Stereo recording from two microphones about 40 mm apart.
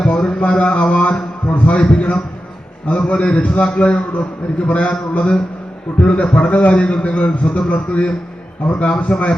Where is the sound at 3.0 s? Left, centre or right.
Left.